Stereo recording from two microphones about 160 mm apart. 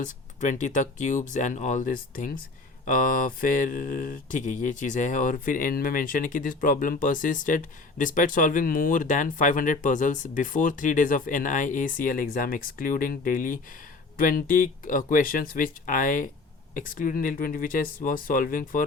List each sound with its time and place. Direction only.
0.0 s speech: 50° left (ahead or behind)
2.8 s mantra: 60° left (ahead or behind)